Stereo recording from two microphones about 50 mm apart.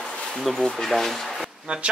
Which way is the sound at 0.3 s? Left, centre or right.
Centre.